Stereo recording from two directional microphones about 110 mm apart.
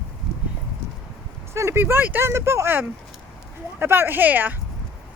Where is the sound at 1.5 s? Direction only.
25° right (ahead or behind).